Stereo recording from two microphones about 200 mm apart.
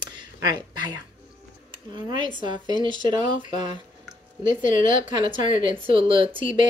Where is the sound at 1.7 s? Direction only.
25° right (ahead or behind).